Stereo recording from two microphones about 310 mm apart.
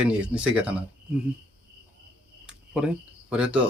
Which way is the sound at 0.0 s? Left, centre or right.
Centre.